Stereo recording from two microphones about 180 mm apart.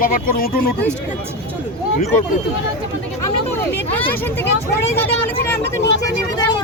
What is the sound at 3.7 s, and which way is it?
Vehicle, 10° left (ahead or behind).